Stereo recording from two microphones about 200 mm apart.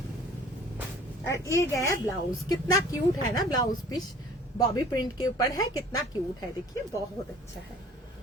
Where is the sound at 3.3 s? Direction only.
20° left (ahead or behind).